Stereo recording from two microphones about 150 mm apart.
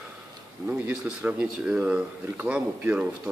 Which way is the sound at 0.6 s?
10° right (ahead or behind).